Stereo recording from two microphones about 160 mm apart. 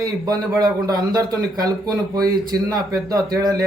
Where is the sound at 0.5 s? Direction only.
20° right (ahead or behind).